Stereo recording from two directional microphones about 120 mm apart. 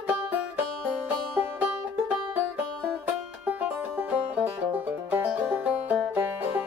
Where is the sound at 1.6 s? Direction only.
15° right (ahead or behind).